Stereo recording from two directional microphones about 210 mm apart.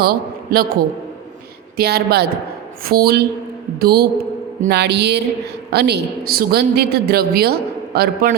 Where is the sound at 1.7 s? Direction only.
50° right (ahead or behind).